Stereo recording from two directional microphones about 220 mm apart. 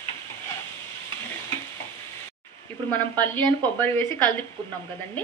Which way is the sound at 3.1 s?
10° left (ahead or behind).